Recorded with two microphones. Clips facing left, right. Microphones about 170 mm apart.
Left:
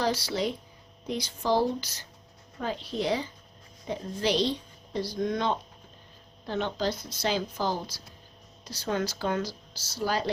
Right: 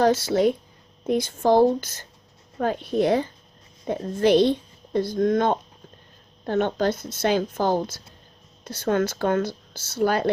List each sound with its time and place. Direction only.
0.0 s a woman's voice: 50° right (ahead or behind)